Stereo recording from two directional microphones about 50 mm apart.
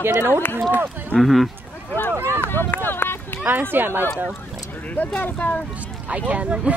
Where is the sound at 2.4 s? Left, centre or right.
Left.